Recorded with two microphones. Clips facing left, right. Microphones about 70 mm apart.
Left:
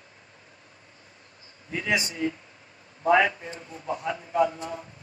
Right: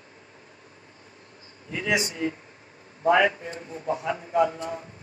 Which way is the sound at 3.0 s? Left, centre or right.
Right.